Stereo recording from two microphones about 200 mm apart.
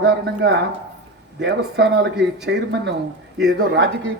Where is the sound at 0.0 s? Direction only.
60° right (ahead or behind).